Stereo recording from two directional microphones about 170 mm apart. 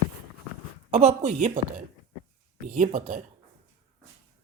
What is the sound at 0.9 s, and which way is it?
Speech, 40° right (ahead or behind).